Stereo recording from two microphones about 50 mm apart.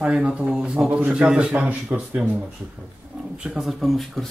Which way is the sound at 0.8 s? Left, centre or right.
Right.